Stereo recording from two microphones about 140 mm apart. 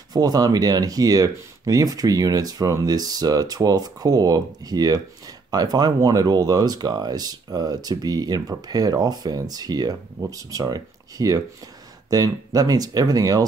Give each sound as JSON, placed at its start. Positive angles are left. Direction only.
{"t": 0.1, "sound": "speech", "side_deg": -25}